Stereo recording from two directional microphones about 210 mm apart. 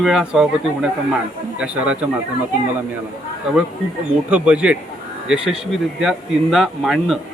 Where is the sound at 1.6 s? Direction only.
5° right (ahead or behind).